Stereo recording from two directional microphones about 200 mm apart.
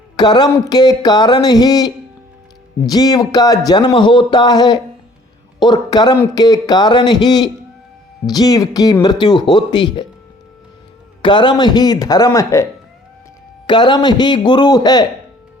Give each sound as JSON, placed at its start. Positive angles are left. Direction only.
{"t": 0.2, "sound": "speech", "side_deg": 20}
{"t": 11.2, "sound": "speech", "side_deg": 25}
{"t": 13.7, "sound": "speech", "side_deg": 20}